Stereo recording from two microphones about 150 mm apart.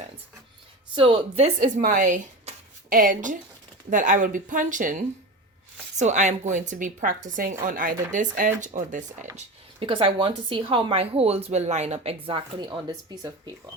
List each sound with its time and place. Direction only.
0.9 s speech: 35° right (ahead or behind)
1.5 s a woman's voice: 60° right (ahead or behind)
9.8 s speech: 35° right (ahead or behind)